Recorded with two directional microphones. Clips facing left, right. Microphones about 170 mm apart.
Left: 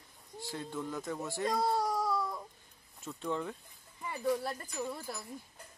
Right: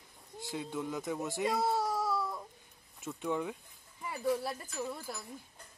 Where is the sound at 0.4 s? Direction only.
15° right (ahead or behind).